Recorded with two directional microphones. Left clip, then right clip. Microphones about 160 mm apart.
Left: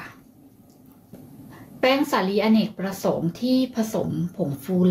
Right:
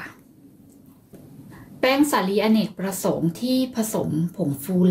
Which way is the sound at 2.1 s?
10° right (ahead or behind).